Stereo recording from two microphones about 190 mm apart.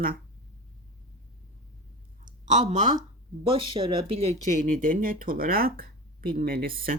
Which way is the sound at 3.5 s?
25° right (ahead or behind).